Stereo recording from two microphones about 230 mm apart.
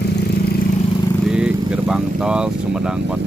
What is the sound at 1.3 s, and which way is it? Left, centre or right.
Speech, centre.